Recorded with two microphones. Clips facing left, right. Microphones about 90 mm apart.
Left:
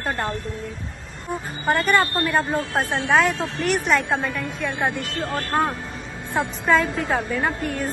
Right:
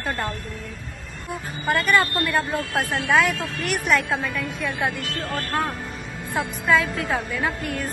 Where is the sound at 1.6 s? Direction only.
35° left (ahead or behind).